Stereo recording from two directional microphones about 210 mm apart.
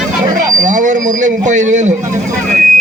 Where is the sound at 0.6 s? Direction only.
35° right (ahead or behind).